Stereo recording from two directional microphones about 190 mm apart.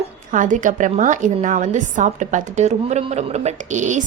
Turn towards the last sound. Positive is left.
turn(degrees=-40)  # may be behind; listen again after turning